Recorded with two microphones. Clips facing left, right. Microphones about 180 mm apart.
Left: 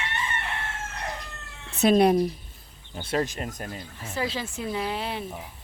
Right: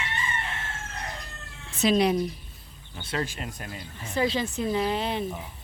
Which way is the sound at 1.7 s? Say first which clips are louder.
Left 3 dB; 55° left (ahead or behind).